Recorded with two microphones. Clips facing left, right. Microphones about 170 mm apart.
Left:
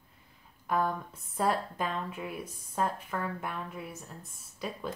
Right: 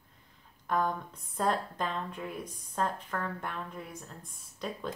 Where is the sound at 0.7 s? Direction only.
5° left (ahead or behind).